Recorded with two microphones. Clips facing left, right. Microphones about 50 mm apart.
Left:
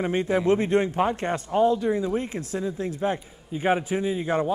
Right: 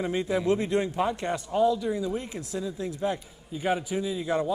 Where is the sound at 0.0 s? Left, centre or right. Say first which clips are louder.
Left 4 dB; left.